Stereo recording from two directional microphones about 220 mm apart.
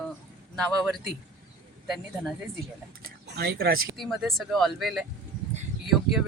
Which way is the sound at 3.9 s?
Centre (ahead or behind).